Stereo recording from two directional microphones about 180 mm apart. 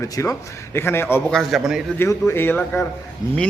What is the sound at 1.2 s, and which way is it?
Speech, centre (ahead or behind).